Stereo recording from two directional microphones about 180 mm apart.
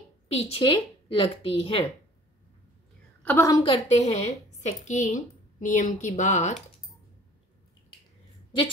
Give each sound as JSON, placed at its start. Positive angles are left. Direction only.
{"t": 0.3, "sound": "a woman's voice", "side_deg": 35}
{"t": 3.2, "sound": "a woman's voice", "side_deg": 10}
{"t": 3.6, "sound": "a woman's voice", "side_deg": 35}